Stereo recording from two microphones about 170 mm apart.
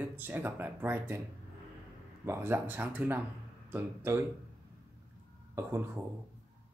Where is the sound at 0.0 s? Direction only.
10° right (ahead or behind).